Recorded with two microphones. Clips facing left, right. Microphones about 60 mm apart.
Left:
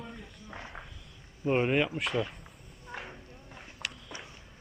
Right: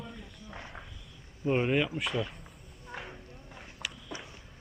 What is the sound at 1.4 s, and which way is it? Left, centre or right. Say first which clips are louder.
Speech: left 1 dB; centre.